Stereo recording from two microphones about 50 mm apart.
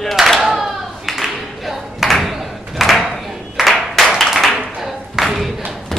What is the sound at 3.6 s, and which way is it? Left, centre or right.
Clapping, centre.